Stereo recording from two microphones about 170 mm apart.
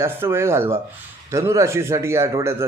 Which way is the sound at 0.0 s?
15° right (ahead or behind).